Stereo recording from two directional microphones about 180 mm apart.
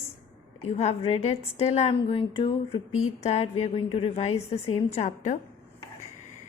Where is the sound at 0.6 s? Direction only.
35° left (ahead or behind).